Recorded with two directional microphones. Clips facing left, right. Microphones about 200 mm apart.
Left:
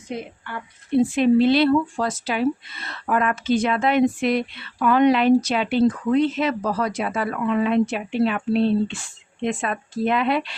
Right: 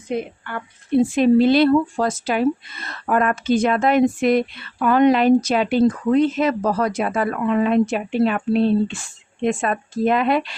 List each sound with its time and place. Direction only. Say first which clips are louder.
1.1 s speech: right 3 dB; 40° right (ahead or behind)